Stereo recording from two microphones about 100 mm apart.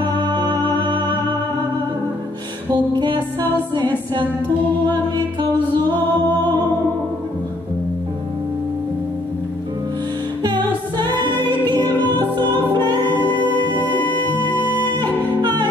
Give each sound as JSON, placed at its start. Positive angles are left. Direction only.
{"t": 0.1, "sound": "music", "side_deg": -50}
{"t": 2.7, "sound": "music", "side_deg": -50}
{"t": 3.3, "sound": "music", "side_deg": 20}
{"t": 5.9, "sound": "music", "side_deg": 20}
{"t": 10.4, "sound": "music", "side_deg": -45}
{"t": 11.6, "sound": "music", "side_deg": 20}
{"t": 12.4, "sound": "music", "side_deg": -50}
{"t": 13.9, "sound": "music", "side_deg": 20}